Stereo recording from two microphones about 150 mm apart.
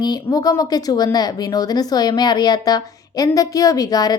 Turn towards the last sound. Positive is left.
turn(degrees=25)  # may be behind; listen again after turning